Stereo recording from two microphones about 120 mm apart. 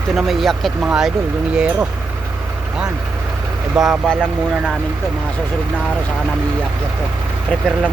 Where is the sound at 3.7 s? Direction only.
5° right (ahead or behind).